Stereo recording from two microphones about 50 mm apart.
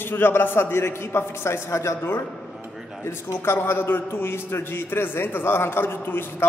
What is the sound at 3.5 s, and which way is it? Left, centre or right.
A man's voice, left.